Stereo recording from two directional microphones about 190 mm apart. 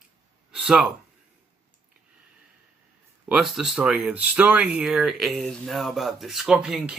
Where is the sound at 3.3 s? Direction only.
Centre (ahead or behind).